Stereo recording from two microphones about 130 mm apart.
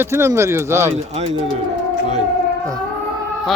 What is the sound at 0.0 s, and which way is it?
Speech, 20° right (ahead or behind).